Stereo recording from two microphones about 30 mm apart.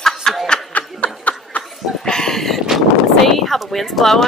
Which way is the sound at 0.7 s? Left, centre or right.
Left.